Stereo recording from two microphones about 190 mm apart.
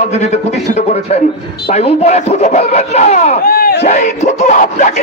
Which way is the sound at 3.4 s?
55° left (ahead or behind).